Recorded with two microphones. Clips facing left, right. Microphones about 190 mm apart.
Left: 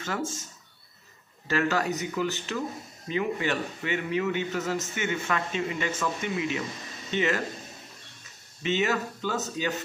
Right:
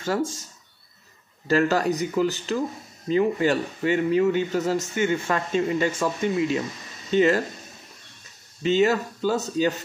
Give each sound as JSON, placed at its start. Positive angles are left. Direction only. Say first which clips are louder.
{"t": 0.0, "sound": "a man's voice", "louder": "right 6 dB", "side_deg": -35}
{"t": 1.5, "sound": "a man's voice", "louder": "right 6 dB", "side_deg": -35}
{"t": 8.6, "sound": "a man's voice", "louder": "right 6 dB", "side_deg": -35}